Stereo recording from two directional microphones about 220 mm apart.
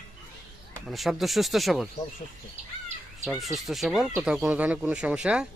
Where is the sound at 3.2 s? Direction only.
Centre (ahead or behind).